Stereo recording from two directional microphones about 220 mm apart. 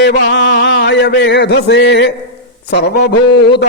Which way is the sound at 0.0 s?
50° left (ahead or behind).